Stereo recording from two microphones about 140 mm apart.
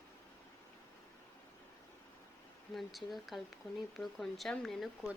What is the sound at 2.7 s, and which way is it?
Speech, centre (ahead or behind).